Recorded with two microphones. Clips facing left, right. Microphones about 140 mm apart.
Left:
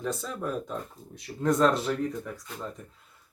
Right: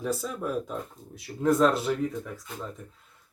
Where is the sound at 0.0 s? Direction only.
5° right (ahead or behind).